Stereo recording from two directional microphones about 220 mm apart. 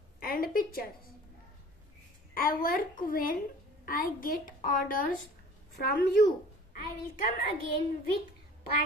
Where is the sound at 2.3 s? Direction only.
40° left (ahead or behind).